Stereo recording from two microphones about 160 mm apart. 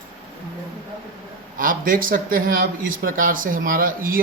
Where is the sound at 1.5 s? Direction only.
60° right (ahead or behind).